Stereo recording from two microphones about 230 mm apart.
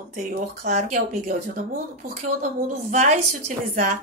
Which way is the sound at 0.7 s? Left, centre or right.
Right.